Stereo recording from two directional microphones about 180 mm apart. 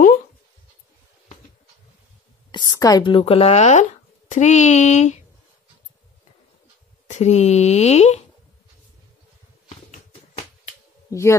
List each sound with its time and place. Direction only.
2.5 s speech: 20° left (ahead or behind); by 5.2 s 40° left (ahead or behind)
7.1 s speech: 40° left (ahead or behind)
9.7 s a sound: 40° left (ahead or behind)
11.1 s speech: 15° left (ahead or behind)